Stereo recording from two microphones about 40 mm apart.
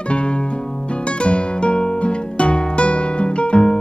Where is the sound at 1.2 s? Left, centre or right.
Left.